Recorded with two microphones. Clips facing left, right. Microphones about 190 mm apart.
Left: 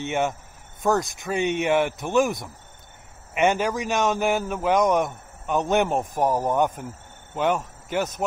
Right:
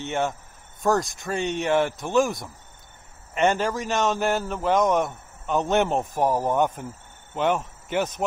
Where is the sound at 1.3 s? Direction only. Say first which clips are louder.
Left 1 dB; 15° left (ahead or behind).